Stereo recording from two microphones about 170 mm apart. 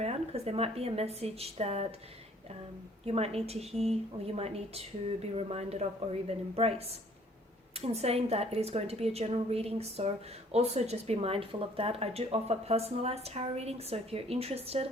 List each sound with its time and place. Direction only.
0.0 s speech: 40° right (ahead or behind)
3.0 s speech: 35° right (ahead or behind)